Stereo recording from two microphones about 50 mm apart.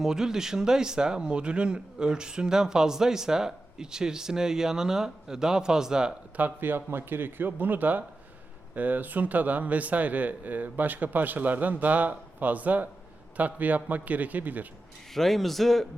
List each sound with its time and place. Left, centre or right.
0.0 s speech: centre
6.6 s speech: right
15.1 s speech: centre